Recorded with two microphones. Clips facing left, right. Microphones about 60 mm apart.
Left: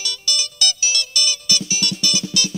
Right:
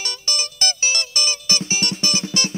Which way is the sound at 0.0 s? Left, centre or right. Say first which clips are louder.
Left 1 dB; right.